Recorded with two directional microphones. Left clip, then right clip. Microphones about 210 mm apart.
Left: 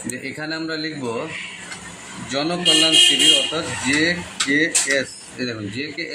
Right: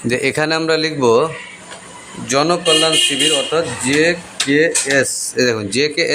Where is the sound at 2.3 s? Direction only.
50° right (ahead or behind).